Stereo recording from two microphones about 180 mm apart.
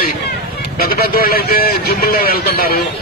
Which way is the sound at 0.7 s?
55° left (ahead or behind).